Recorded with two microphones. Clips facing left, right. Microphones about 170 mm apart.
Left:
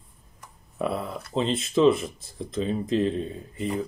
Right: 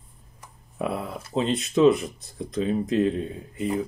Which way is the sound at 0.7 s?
Centre (ahead or behind).